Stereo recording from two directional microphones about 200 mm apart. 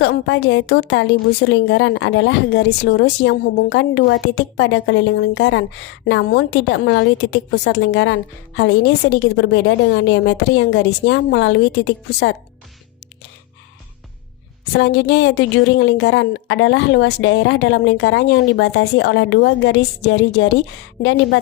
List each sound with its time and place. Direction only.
0.0 s a woman's voice: 65° left (ahead or behind)
2.9 s a woman's voice: 60° left (ahead or behind)
14.7 s a woman's voice: 65° left (ahead or behind)